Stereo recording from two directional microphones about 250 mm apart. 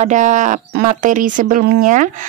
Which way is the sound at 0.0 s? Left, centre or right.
Right.